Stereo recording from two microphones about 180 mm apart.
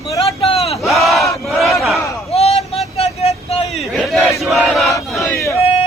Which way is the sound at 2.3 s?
35° left (ahead or behind).